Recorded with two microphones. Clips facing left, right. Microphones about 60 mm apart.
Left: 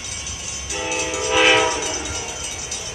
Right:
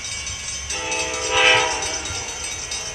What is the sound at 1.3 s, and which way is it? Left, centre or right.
Train, centre.